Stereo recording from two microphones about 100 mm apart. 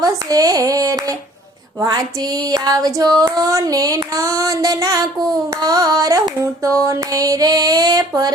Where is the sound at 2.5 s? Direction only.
40° right (ahead or behind).